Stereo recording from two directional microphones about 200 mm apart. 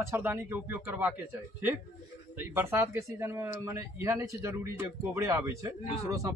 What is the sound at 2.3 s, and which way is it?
Speech, 10° right (ahead or behind).